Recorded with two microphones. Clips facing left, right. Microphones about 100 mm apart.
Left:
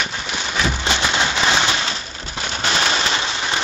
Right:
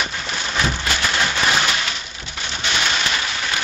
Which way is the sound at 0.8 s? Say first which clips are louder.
Left 2 dB; 20° left (ahead or behind).